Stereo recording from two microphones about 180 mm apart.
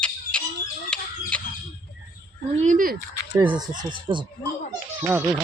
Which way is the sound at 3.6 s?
25° right (ahead or behind).